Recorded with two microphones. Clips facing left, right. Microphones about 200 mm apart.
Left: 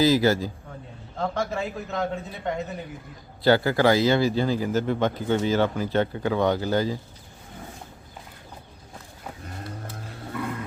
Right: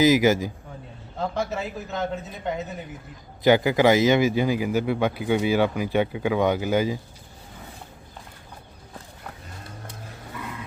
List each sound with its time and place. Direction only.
0.0 s speech: 15° right (ahead or behind)
1.2 s a man's voice: centre (ahead or behind)
3.4 s speech: 15° right (ahead or behind)